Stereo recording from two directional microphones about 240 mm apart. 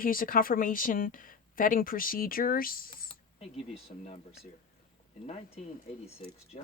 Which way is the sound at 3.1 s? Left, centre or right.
Left.